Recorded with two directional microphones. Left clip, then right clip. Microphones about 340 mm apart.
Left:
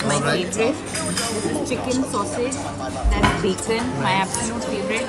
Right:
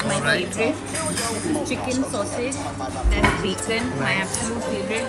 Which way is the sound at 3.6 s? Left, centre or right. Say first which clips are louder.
Left 2 dB; left.